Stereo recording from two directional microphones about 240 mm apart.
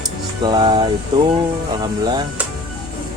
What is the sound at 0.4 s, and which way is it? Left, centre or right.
Speech, centre.